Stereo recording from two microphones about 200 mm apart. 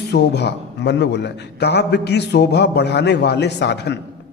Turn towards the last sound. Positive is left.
turn(degrees=60)  # may be behind; listen again after turning